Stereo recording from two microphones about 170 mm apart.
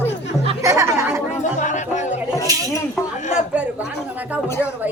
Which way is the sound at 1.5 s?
45° left (ahead or behind).